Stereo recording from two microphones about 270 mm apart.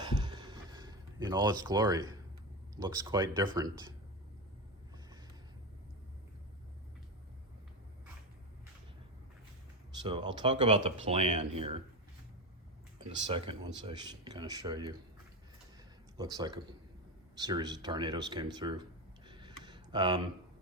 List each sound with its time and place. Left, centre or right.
0.0 s a sound: centre
2.7 s speech: centre
10.0 s speech: centre
13.2 s speech: centre
16.1 s speech: centre